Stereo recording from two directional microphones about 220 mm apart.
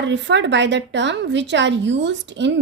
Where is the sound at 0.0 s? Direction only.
55° right (ahead or behind).